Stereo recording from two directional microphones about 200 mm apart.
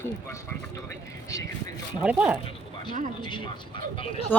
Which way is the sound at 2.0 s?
10° right (ahead or behind).